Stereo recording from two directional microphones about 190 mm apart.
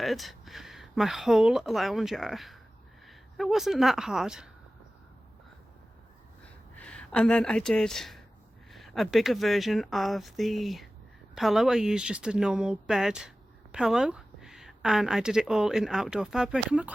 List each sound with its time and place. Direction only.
0.0 s a woman's voice: centre (ahead or behind)
6.7 s speech: 5° left (ahead or behind)